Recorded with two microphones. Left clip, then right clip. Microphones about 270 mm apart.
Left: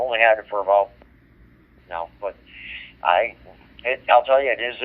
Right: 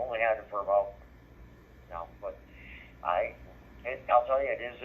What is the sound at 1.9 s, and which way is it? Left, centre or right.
Speech, centre.